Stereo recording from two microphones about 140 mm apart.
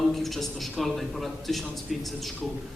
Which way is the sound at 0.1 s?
Centre (ahead or behind).